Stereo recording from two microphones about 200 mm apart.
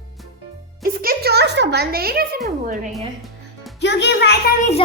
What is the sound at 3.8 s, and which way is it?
Speech, 60° left (ahead or behind).